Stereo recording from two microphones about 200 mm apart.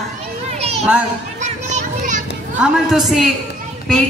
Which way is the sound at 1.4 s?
35° right (ahead or behind).